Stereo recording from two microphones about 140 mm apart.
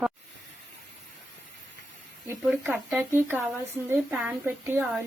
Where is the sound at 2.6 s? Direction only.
15° right (ahead or behind).